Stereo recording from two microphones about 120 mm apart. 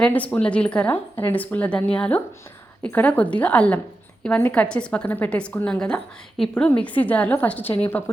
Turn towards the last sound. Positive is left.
turn(degrees=15)  # may be behind; listen again after turning